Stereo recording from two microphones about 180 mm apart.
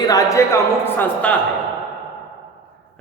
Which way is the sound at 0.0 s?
20° left (ahead or behind).